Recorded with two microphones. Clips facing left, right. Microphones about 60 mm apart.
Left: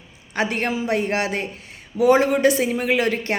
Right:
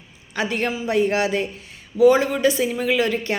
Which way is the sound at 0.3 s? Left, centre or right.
Left.